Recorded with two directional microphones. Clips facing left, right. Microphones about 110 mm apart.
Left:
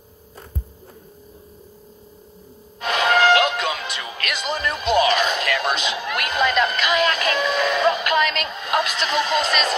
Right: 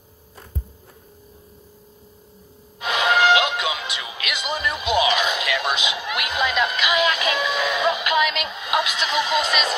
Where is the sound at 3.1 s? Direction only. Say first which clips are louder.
Left 1 dB; 45° left (ahead or behind).